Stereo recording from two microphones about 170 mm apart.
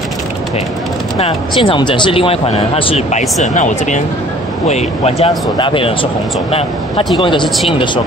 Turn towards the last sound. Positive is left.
turn(degrees=30)  # may be behind; listen again after turning